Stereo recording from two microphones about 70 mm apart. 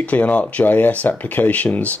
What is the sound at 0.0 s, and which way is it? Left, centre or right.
Speech, centre.